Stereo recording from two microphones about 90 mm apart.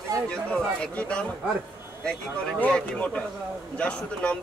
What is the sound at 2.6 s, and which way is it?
Speech, 15° left (ahead or behind).